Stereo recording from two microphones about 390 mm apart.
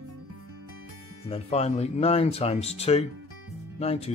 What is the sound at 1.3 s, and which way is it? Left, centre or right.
Speech, centre.